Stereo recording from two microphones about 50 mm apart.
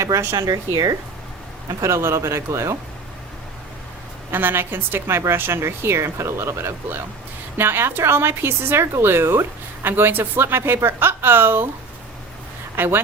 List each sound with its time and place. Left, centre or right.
0.0 s speech: right
1.8 s speech: right
4.3 s a woman's voice: right
12.7 s speech: right